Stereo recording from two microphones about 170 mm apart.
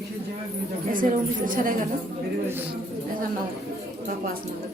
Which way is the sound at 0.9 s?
55° right (ahead or behind).